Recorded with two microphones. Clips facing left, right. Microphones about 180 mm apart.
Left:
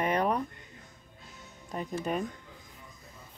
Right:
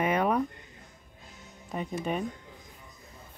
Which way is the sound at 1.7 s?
5° right (ahead or behind).